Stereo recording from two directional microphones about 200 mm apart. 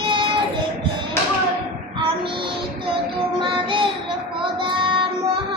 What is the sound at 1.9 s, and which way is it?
Child singing, 25° right (ahead or behind).